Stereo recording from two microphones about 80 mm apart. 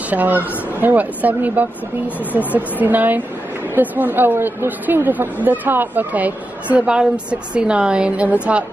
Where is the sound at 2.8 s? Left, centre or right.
Right.